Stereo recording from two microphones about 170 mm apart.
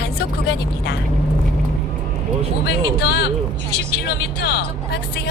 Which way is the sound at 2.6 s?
75° left (ahead or behind).